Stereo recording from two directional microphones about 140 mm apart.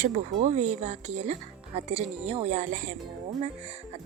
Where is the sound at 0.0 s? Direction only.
60° right (ahead or behind).